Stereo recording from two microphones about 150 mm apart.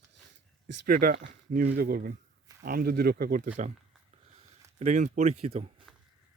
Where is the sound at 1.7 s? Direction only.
80° right.